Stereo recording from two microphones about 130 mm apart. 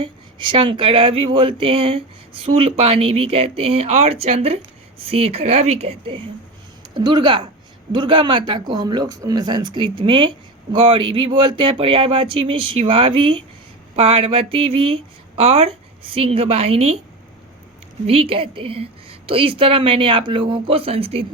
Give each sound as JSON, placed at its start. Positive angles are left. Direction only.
{"t": 0.0, "sound": "speech", "side_deg": -40}
{"t": 6.9, "sound": "speech", "side_deg": -35}
{"t": 18.0, "sound": "speech", "side_deg": -45}